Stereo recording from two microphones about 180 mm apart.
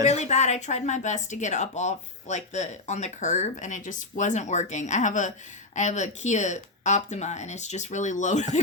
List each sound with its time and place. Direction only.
0.0 s a woman's voice: 40° left (ahead or behind)